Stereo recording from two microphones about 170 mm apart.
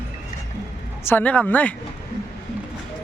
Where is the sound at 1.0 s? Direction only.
10° left (ahead or behind).